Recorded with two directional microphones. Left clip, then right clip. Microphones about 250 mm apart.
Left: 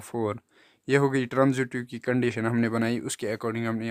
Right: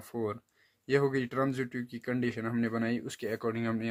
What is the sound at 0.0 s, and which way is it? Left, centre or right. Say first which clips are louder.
Speech: left 6 dB; left.